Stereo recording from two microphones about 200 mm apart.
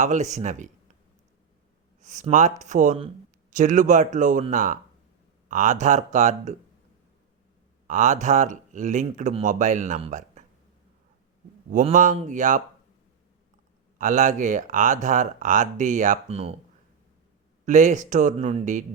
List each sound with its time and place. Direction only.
0.0 s speech: 35° right (ahead or behind)
2.0 s speech: 35° right (ahead or behind)
7.9 s speech: 40° right (ahead or behind)
11.7 s speech: 40° right (ahead or behind)
14.0 s speech: 40° right (ahead or behind)
17.7 s speech: 40° right (ahead or behind)